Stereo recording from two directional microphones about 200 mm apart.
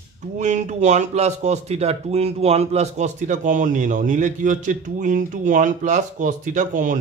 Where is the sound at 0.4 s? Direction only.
35° right (ahead or behind).